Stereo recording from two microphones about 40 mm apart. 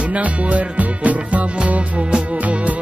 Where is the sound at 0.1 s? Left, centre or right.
Right.